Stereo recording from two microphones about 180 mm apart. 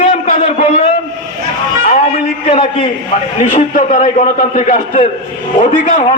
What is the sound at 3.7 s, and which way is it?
A man's voice, 45° left (ahead or behind).